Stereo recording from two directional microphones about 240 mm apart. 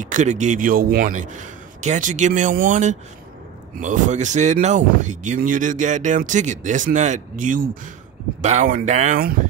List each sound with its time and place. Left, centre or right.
0.0 s speech: right